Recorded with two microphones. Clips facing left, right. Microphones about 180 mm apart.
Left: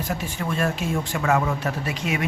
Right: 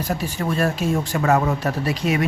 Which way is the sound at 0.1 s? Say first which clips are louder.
Right 5 dB; 40° right (ahead or behind).